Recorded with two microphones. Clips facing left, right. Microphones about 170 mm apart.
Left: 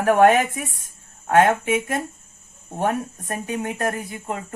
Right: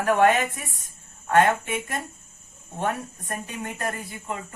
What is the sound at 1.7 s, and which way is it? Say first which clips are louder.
Speech: left 8 dB; 55° left (ahead or behind).